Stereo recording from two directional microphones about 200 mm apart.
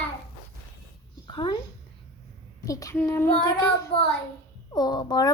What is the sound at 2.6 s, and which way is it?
A child's voice, 15° left (ahead or behind).